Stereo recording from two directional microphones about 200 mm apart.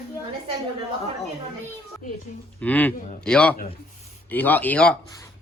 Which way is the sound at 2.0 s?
40° left (ahead or behind).